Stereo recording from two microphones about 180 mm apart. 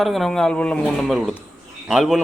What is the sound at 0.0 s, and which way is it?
A man's voice, centre (ahead or behind).